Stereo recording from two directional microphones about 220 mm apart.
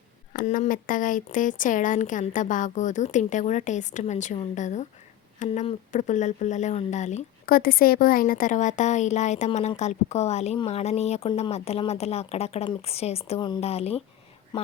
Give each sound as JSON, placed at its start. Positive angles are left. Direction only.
{"t": 0.3, "sound": "speech", "side_deg": 35}